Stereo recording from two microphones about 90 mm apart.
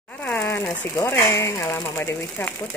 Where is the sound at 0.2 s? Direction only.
20° left (ahead or behind).